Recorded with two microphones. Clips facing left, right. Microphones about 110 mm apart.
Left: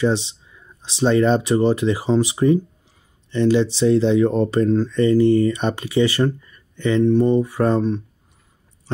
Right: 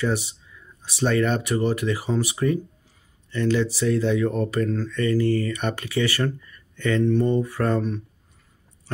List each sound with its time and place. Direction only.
0.0 s speech: 25° left (ahead or behind)